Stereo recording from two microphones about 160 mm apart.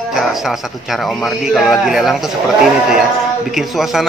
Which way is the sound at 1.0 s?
Centre (ahead or behind).